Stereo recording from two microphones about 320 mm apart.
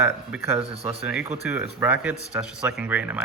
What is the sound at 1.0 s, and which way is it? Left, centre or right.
Speech, centre.